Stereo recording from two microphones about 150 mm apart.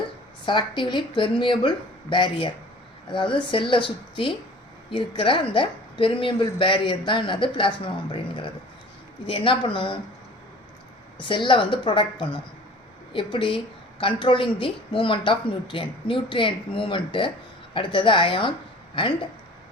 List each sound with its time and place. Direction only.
0.4 s speech: 30° left (ahead or behind)
11.2 s speech: 35° left (ahead or behind)